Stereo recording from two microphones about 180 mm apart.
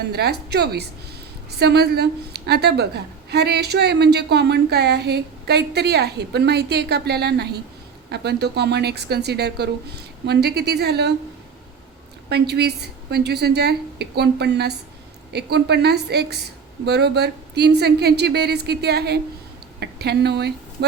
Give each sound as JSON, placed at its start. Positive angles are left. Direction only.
{"t": 0.1, "sound": "a woman's voice", "side_deg": -65}
{"t": 12.3, "sound": "a woman's voice", "side_deg": -65}